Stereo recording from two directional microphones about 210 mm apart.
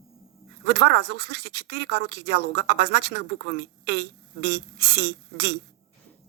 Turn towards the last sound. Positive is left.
turn(degrees=-50)  # may be behind; listen again after turning